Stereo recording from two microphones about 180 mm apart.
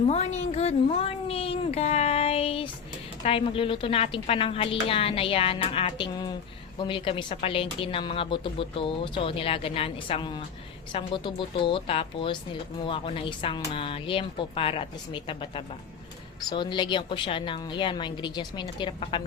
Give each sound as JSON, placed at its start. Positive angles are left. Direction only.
{"t": 0.0, "sound": "a woman's voice", "side_deg": 35}